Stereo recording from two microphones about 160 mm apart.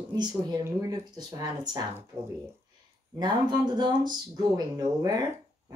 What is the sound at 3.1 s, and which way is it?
Speech, 25° right (ahead or behind).